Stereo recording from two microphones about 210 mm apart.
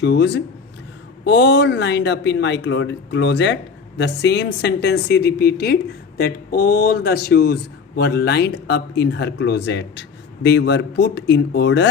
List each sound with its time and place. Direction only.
0.0 s speech: 55° left (ahead or behind)